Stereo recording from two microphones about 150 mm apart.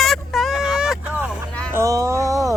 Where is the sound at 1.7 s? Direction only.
20° right (ahead or behind).